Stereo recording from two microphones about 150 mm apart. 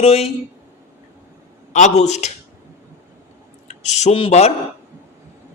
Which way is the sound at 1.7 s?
55° left (ahead or behind).